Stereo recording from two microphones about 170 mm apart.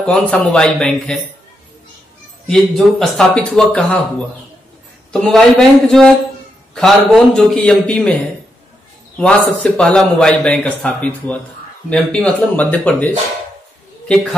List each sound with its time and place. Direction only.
0.0 s a man's voice: 5° left (ahead or behind)
2.4 s a man's voice: 5° left (ahead or behind)
5.1 s a man's voice: centre (ahead or behind)
9.6 s a man's voice: 5° left (ahead or behind)